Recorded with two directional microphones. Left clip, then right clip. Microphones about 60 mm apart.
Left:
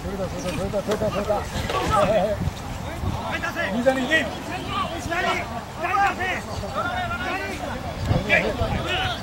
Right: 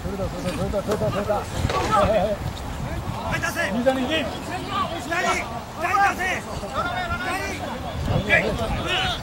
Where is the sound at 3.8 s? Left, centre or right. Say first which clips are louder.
Left 3 dB; left.